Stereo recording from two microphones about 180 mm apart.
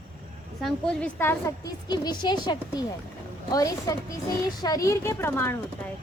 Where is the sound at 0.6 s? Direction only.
5° left (ahead or behind).